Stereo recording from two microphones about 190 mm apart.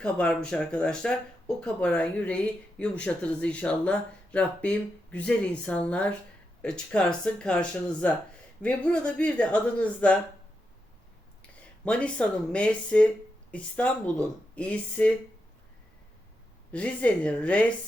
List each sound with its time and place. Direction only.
0.0 s speech: 5° left (ahead or behind)
11.9 s speech: 5° left (ahead or behind)
16.7 s speech: 5° left (ahead or behind)